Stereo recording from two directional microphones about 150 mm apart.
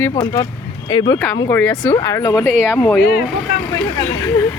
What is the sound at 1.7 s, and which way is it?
Speech, 30° left (ahead or behind).